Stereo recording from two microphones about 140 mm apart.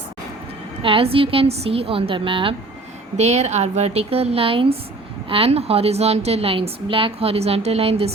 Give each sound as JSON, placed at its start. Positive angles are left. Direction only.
{"t": 0.8, "sound": "a woman's voice", "side_deg": -40}
{"t": 3.2, "sound": "a woman's voice", "side_deg": -55}